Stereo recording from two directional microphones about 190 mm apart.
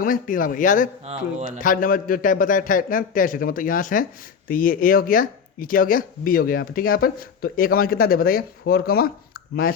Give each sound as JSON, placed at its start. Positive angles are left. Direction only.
{"t": 0.0, "sound": "speech", "side_deg": 45}
{"t": 1.0, "sound": "speech", "side_deg": -35}
{"t": 1.5, "sound": "speech", "side_deg": 45}